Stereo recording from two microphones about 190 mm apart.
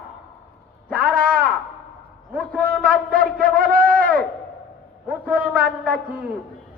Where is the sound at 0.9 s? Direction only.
50° right (ahead or behind).